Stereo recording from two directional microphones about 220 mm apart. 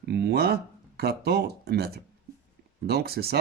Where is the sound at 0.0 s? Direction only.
50° right (ahead or behind).